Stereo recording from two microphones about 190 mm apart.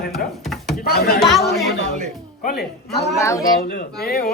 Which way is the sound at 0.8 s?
55° left (ahead or behind).